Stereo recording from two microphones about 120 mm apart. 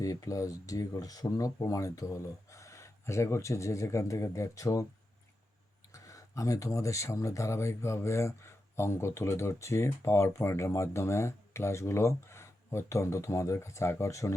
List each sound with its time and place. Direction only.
0.0 s speech: 30° left (ahead or behind)
5.9 s speech: 25° left (ahead or behind)